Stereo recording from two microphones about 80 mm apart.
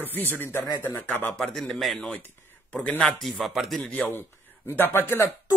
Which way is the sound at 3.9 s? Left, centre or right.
Left.